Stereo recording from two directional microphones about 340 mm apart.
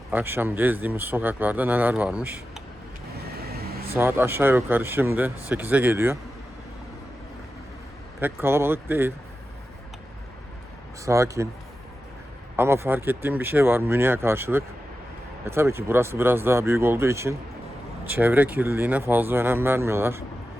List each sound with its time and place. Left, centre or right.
0.1 s speech: centre
3.5 s vehicle: right
3.9 s speech: centre
8.2 s speech: centre
11.0 s speech: centre
12.5 s speech: centre